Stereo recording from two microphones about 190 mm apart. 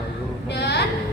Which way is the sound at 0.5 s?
60° left (ahead or behind).